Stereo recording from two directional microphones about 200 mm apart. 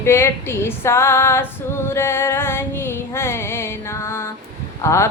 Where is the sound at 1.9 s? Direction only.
10° left (ahead or behind).